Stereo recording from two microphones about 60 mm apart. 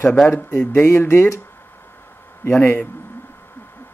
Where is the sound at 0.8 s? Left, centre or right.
Left.